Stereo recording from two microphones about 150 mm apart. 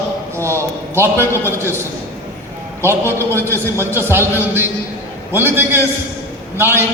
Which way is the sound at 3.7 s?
15° right (ahead or behind).